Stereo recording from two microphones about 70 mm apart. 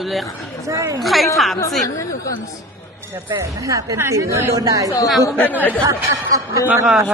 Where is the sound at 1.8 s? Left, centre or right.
Left.